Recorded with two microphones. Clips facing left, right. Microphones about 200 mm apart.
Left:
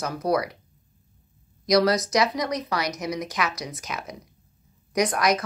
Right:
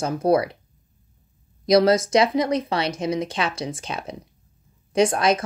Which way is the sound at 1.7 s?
25° right (ahead or behind).